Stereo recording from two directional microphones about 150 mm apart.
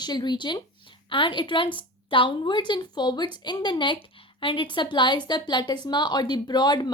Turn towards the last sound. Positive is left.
turn(degrees=30)  # may be behind; listen again after turning